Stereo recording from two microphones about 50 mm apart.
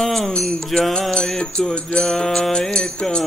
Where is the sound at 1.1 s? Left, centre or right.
Centre.